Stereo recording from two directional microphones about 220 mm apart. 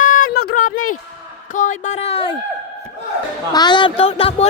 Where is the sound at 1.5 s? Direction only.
35° left (ahead or behind).